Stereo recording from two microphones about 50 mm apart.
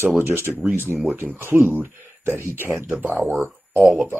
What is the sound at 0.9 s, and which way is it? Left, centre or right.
Speech, centre.